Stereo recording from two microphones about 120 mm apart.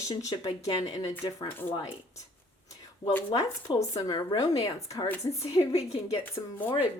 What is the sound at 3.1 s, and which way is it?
Speech, 15° left (ahead or behind).